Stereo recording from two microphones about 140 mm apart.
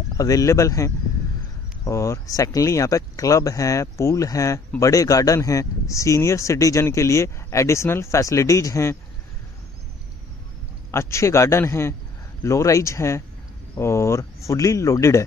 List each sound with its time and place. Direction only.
0.2 s speech: 25° left (ahead or behind)
10.9 s speech: 20° left (ahead or behind)